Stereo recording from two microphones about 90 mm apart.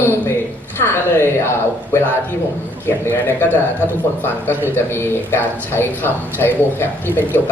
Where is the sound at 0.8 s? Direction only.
25° left (ahead or behind).